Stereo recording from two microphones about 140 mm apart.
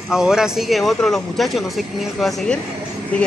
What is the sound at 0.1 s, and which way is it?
Speech, 5° right (ahead or behind).